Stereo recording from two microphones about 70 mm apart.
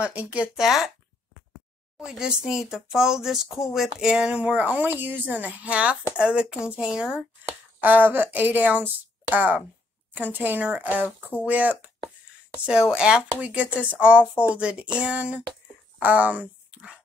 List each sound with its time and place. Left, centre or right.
0.0 s speech: centre
0.6 s speech: centre
2.0 s a woman's voice: centre
7.4 s speech: right
12.9 s a woman's voice: centre